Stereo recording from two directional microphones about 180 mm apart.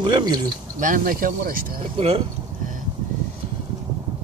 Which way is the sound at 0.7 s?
50° right (ahead or behind).